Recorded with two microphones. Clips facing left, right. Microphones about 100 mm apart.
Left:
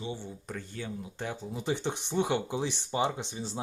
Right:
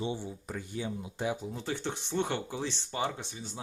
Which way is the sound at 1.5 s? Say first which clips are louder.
Left 3 dB; 20° left (ahead or behind).